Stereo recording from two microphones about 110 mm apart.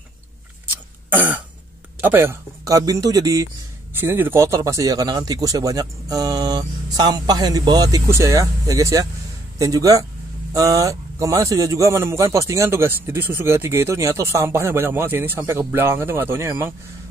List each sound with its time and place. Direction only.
2.0 s a man's voice: 20° right (ahead or behind)
3.9 s a man's voice: 20° right (ahead or behind)